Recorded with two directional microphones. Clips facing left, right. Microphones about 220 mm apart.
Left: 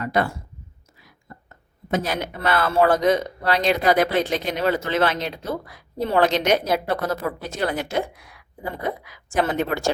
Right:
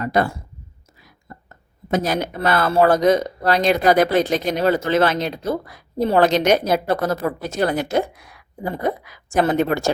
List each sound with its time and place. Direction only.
0.0 s speech: 40° right (ahead or behind)
1.5 s a woman's voice: 40° right (ahead or behind)